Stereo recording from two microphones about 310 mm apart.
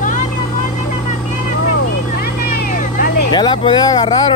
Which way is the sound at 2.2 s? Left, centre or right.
Left.